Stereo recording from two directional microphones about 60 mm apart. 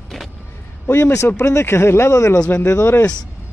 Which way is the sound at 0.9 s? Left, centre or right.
Left.